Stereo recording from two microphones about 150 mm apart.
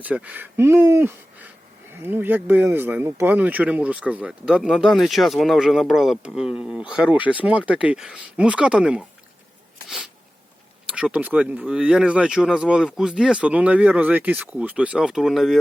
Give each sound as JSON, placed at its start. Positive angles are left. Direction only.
{"t": 0.0, "sound": "speech", "side_deg": -10}
{"t": 10.8, "sound": "speech", "side_deg": -5}